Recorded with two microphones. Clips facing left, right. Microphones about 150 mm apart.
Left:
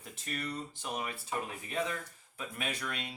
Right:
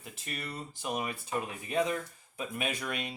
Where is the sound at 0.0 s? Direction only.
5° right (ahead or behind).